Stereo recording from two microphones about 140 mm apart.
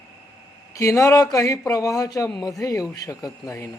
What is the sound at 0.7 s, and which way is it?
A man's voice, 25° left (ahead or behind).